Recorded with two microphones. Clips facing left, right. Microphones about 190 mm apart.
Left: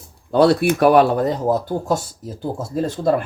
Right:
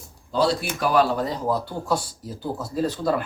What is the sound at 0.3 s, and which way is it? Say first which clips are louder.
Speech: left 8 dB; 60° left (ahead or behind).